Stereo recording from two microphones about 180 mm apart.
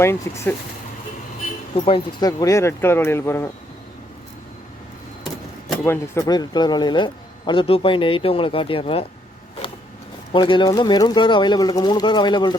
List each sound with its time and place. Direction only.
0.0 s speech: 15° left (ahead or behind)
1.7 s speech: 30° left (ahead or behind)
5.8 s speech: 15° left (ahead or behind); by 9.0 s 30° left (ahead or behind)
10.3 s speech: 25° left (ahead or behind)